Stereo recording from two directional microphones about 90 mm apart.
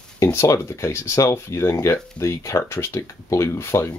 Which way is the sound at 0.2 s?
35° left (ahead or behind).